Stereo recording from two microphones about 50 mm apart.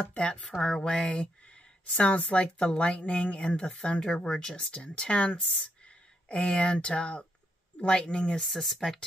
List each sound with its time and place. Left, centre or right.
0.0 s speech: left
0.6 s speech: centre
8.4 s speech: centre